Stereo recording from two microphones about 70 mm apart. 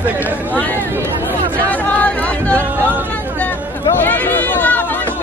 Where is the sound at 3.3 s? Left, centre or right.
Left.